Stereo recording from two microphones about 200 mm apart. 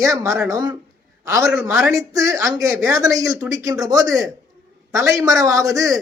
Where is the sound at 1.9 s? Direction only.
15° right (ahead or behind).